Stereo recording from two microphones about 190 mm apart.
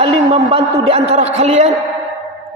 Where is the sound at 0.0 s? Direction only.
30° right (ahead or behind).